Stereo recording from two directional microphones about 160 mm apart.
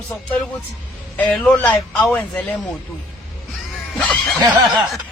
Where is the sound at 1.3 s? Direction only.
5° left (ahead or behind).